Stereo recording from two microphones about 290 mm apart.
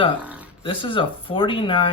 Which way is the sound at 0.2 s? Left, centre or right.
Centre.